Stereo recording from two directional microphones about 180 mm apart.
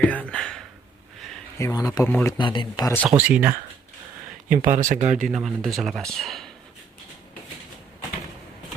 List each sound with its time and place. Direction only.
0.0 s a sound: 5° left (ahead or behind)
1.5 s speech: 20° left (ahead or behind)
2.4 s speech: 25° left (ahead or behind)
3.2 s speech: 10° right (ahead or behind)
4.4 s speech: 45° right (ahead or behind)
5.1 s speech: centre (ahead or behind)